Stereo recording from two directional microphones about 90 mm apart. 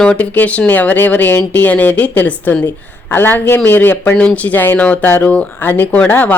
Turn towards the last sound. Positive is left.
turn(degrees=20)  # may be behind; listen again after turning